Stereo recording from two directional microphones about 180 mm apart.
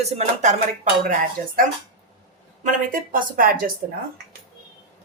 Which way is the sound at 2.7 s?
50° right (ahead or behind).